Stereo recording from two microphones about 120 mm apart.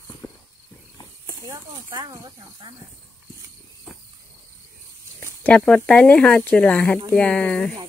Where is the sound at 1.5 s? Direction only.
25° right (ahead or behind).